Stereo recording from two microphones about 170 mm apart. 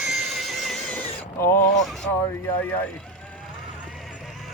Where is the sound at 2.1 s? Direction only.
15° left (ahead or behind).